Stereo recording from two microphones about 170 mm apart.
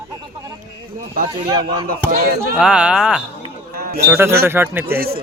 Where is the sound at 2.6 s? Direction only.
5° right (ahead or behind).